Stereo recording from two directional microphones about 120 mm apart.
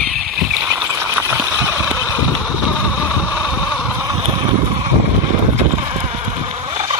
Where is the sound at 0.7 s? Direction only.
20° right (ahead or behind).